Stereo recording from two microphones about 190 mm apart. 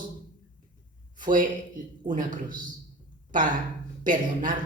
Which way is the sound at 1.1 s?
45° right (ahead or behind).